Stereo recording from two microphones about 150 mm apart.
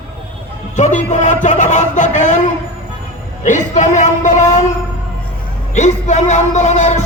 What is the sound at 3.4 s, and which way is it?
A man's voice, 55° left (ahead or behind).